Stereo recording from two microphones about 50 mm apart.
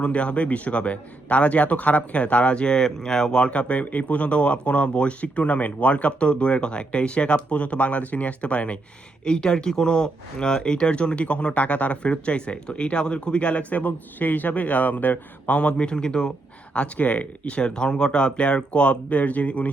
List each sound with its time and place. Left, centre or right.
0.0 s a man's voice: left